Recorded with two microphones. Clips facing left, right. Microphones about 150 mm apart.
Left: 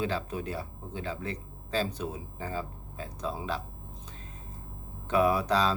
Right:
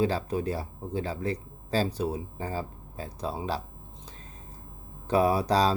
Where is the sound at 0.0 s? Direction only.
35° right (ahead or behind).